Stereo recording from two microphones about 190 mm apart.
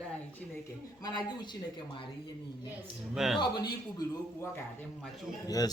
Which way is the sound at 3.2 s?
Centre (ahead or behind).